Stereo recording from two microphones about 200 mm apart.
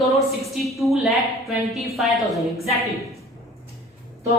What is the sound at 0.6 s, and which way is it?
A woman's voice, centre (ahead or behind).